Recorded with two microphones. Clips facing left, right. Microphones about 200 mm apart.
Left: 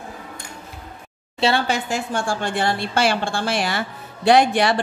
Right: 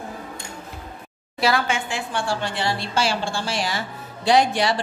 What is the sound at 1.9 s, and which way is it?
A woman's voice, 45° left (ahead or behind).